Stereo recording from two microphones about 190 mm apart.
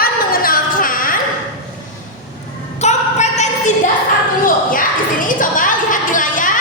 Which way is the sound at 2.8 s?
35° left (ahead or behind).